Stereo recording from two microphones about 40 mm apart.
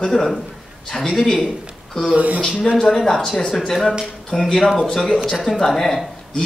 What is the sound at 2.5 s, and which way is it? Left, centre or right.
Speech, centre.